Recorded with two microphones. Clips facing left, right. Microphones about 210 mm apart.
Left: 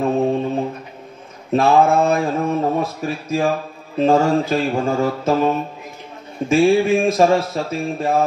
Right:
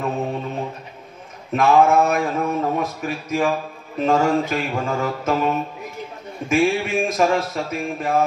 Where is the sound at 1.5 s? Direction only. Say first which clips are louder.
Left 1 dB; 30° left (ahead or behind).